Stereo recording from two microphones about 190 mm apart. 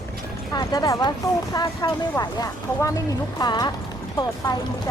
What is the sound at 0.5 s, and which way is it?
Speech, 20° left (ahead or behind).